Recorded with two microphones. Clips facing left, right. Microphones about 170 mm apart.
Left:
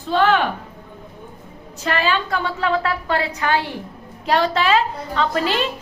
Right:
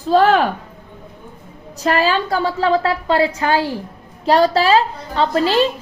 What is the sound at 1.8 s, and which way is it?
A woman's voice, 35° right (ahead or behind).